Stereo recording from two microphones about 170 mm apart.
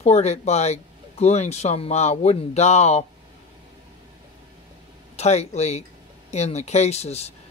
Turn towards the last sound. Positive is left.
turn(degrees=40)  # may be behind; listen again after turning